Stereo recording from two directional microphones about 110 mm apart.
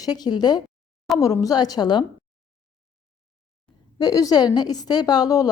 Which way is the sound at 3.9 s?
35° left (ahead or behind).